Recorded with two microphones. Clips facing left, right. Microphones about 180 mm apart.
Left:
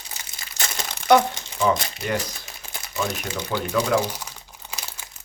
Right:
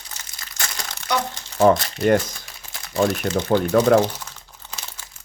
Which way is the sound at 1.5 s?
50° right (ahead or behind).